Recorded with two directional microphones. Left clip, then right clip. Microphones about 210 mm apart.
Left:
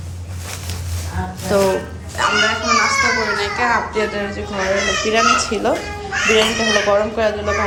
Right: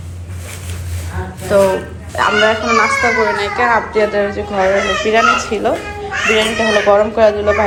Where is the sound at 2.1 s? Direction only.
5° left (ahead or behind).